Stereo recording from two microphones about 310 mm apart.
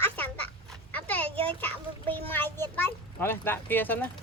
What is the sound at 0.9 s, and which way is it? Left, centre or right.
Dog, centre.